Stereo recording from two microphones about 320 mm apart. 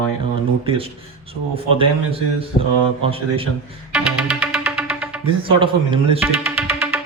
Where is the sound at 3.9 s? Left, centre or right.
Centre.